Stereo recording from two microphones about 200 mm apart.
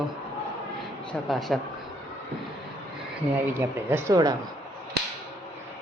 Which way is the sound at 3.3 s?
10° right (ahead or behind).